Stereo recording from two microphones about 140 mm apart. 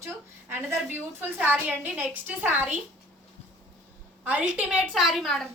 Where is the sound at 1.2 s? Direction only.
10° right (ahead or behind).